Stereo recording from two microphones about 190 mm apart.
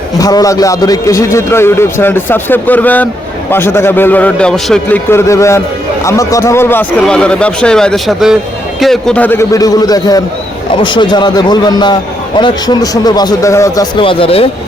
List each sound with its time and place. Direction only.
0.2 s a man's voice: 20° left (ahead or behind)
5.1 s a man's voice: 15° left (ahead or behind)